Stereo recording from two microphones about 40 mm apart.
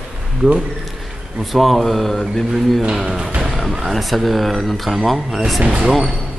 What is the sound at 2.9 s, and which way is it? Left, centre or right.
Cricket, centre.